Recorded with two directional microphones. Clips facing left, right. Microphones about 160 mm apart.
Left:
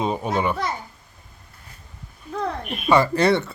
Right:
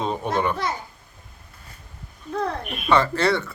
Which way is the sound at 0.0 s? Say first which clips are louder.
Left 1 dB; 10° left (ahead or behind).